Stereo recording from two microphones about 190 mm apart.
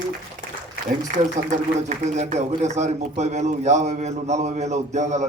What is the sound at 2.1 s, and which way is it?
A man's voice, 40° right (ahead or behind).